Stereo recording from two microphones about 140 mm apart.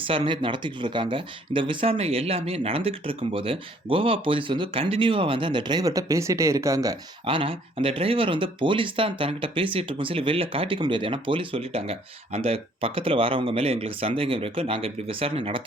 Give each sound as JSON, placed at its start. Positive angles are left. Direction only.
{"t": 0.0, "sound": "speech", "side_deg": -35}
{"t": 7.3, "sound": "speech", "side_deg": -40}